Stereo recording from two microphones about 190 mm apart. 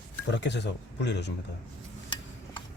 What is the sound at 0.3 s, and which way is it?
Speech, 65° left (ahead or behind).